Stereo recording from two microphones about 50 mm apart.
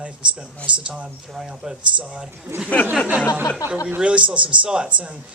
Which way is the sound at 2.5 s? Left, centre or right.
Right.